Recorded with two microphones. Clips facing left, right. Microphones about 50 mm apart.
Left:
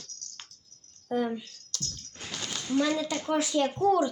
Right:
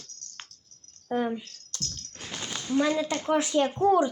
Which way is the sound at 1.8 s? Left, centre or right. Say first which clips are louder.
Right 1 dB; right.